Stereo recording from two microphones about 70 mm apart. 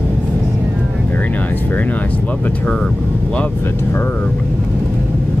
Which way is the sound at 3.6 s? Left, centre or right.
Left.